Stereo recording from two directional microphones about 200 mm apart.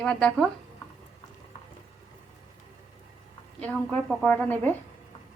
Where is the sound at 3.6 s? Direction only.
5° left (ahead or behind).